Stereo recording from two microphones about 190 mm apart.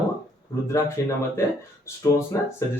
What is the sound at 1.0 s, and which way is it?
Speech, 15° left (ahead or behind).